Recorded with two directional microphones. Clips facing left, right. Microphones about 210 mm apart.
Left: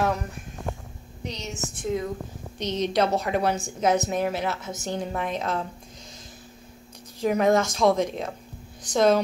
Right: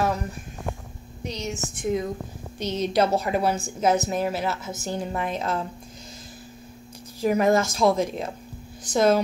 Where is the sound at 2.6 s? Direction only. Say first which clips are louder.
Right 1 dB; 5° right (ahead or behind).